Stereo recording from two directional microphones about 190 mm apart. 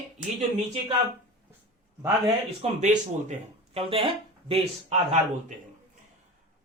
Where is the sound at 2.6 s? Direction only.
40° right (ahead or behind).